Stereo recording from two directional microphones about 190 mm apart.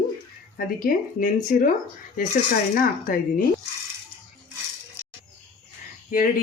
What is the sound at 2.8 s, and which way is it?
Speech, 45° left (ahead or behind).